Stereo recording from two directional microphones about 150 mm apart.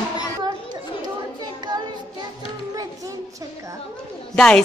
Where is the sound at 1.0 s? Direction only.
25° right (ahead or behind).